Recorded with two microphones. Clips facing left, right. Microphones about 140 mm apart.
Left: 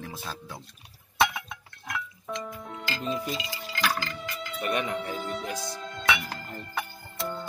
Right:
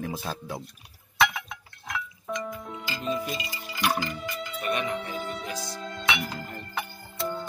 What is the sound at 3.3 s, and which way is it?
Music, 90° left.